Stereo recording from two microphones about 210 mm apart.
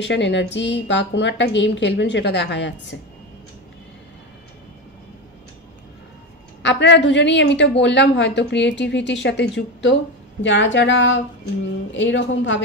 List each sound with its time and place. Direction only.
0.0 s a woman's voice: 55° left (ahead or behind)
6.6 s a woman's voice: 55° left (ahead or behind)